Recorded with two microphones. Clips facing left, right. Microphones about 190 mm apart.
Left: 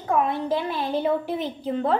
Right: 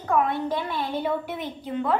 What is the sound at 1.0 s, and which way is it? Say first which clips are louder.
Speech: left 4 dB; 30° left (ahead or behind).